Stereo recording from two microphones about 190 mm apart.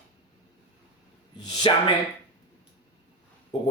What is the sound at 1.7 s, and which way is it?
Speech, 30° left (ahead or behind).